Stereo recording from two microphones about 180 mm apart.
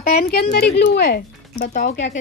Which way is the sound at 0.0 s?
55° left (ahead or behind).